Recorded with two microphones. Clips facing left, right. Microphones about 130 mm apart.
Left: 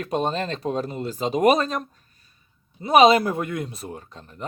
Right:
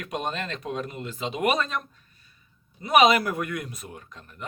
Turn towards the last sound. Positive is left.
turn(degrees=30)  # may be behind; listen again after turning